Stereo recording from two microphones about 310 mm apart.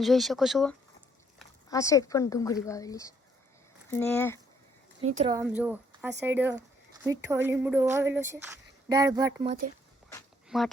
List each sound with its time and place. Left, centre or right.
0.0 s speech: centre
5.0 s speech: right
5.3 s speech: centre
10.5 s speech: centre